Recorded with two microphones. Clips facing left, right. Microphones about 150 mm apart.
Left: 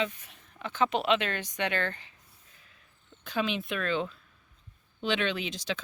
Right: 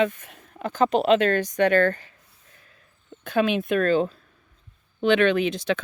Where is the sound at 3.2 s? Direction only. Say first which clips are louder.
Right 9 dB; 55° right (ahead or behind).